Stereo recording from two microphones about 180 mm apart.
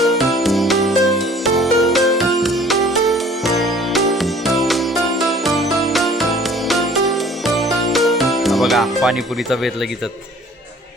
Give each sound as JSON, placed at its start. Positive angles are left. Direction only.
{"t": 0.0, "sound": "music", "side_deg": 0}